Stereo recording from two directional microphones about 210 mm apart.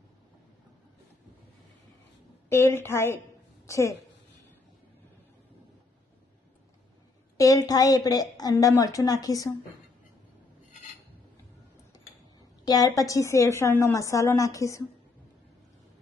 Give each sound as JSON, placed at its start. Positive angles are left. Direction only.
{"t": 2.5, "sound": "a woman's voice", "side_deg": 10}
{"t": 7.3, "sound": "a woman's voice", "side_deg": 15}
{"t": 12.6, "sound": "a woman's voice", "side_deg": 15}